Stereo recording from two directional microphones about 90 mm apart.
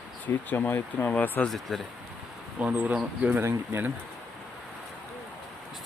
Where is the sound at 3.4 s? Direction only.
30° right (ahead or behind).